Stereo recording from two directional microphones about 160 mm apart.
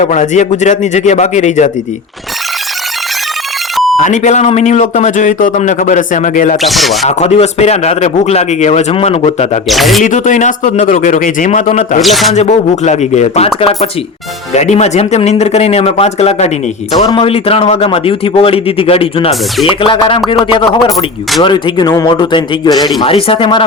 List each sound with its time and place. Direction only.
0.0 s speech: 50° left (ahead or behind)
3.9 s speech: 50° left (ahead or behind)
6.6 s speech: centre (ahead or behind)
7.2 s speech: 40° left (ahead or behind)
9.6 s speech: centre (ahead or behind)
10.0 s speech: 50° left (ahead or behind)
12.0 s speech: centre (ahead or behind)
12.3 s a man's voice: 45° left (ahead or behind)